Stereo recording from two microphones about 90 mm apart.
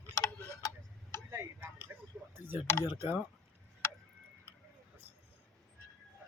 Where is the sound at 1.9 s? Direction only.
25° right (ahead or behind).